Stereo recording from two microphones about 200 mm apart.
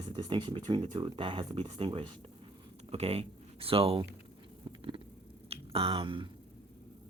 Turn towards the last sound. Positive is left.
turn(degrees=-25)  # may be behind; listen again after turning